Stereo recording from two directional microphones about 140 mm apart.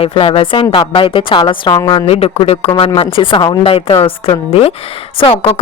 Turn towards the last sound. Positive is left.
turn(degrees=45)  # may be behind; listen again after turning